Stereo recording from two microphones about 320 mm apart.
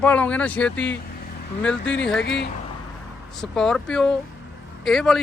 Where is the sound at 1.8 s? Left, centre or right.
Left.